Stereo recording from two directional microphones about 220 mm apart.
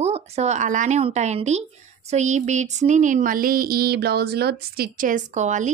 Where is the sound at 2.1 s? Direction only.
30° right (ahead or behind).